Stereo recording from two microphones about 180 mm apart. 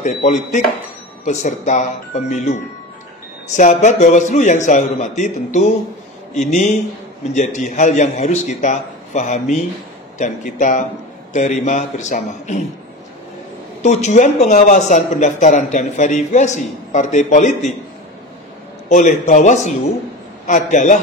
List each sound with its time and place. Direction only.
0.0 s speech: 40° left (ahead or behind)
3.5 s a man's voice: 40° left (ahead or behind)
13.8 s speech: 40° left (ahead or behind)
18.9 s a man's voice: 45° left (ahead or behind)